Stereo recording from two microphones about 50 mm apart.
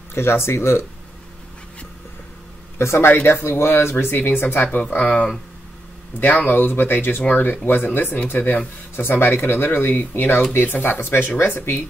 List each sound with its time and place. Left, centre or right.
0.1 s speech: left
2.8 s speech: left
3.3 s speech: left
4.2 s speech: left
6.1 s speech: left
8.9 s speech: left